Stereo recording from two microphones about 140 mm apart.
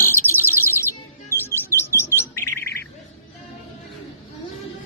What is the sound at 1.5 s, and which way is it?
Bird, 15° left (ahead or behind).